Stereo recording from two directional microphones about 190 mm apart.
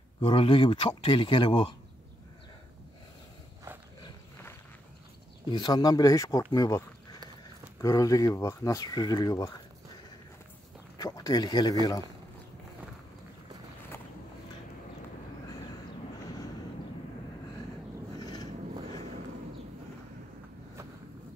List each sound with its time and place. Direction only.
0.2 s speech: 30° left (ahead or behind)
4.0 s a sound: 15° left (ahead or behind)
5.5 s speech: 20° left (ahead or behind)
11.0 s speech: 20° left (ahead or behind)
18.2 s vehicle: 20° left (ahead or behind)